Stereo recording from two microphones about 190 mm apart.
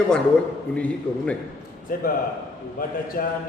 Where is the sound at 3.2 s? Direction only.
50° left (ahead or behind).